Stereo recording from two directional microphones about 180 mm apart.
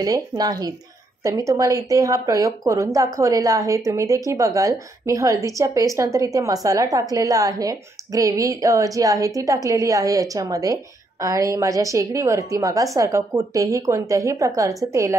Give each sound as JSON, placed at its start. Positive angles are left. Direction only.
{"t": 0.0, "sound": "speech", "side_deg": -20}